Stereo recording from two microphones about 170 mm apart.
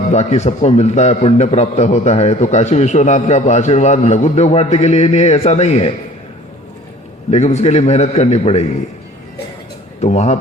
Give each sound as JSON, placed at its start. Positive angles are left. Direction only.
{"t": 0.1, "sound": "a man's voice", "side_deg": 40}
{"t": 7.3, "sound": "a man's voice", "side_deg": 40}
{"t": 10.0, "sound": "a man's voice", "side_deg": 40}